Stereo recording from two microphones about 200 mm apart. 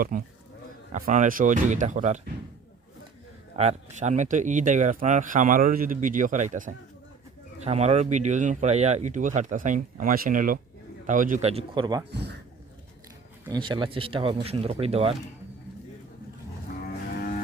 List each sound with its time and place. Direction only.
0.1 s speech: 40° right (ahead or behind)
3.5 s a man's voice: 30° right (ahead or behind)
11.4 s speech: 25° right (ahead or behind)
13.5 s speech: 25° right (ahead or behind)
17.2 s music: 45° left (ahead or behind)